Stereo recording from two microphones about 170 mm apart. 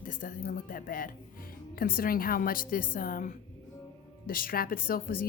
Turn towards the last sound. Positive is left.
turn(degrees=60)  # may be behind; listen again after turning